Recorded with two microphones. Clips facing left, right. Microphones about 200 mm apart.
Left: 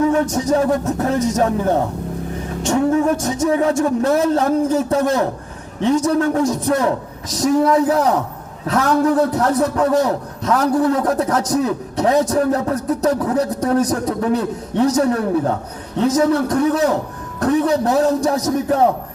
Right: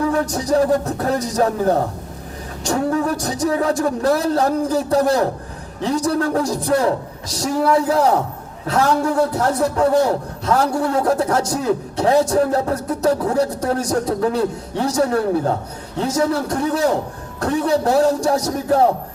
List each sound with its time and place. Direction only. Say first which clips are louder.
0.0 s a man's voice: left 3 dB; 35° right (ahead or behind)